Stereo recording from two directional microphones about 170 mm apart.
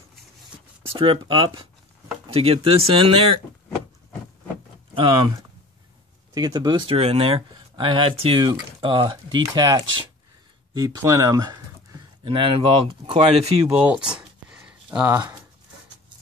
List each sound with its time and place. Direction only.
0.8 s speech: 30° right (ahead or behind)
4.9 s speech: 25° right (ahead or behind)
6.3 s speech: 25° right (ahead or behind)
13.7 s a sound: 10° right (ahead or behind)